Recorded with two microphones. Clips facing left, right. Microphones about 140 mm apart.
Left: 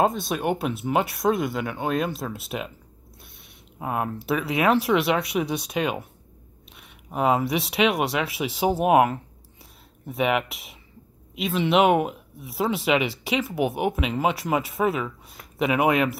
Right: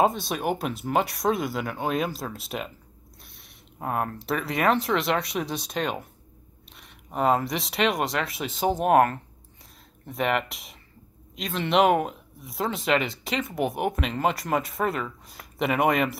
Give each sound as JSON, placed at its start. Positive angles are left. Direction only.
{"t": 0.0, "sound": "speech", "side_deg": 0}
{"t": 3.8, "sound": "speech", "side_deg": 5}